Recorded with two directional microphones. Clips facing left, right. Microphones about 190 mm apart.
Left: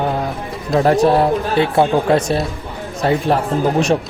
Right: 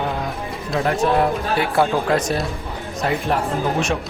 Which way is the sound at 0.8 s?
35° left (ahead or behind).